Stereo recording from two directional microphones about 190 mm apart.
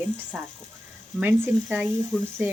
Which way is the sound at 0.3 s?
5° right (ahead or behind).